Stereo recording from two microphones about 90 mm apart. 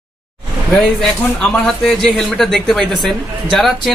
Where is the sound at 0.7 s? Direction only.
Centre (ahead or behind).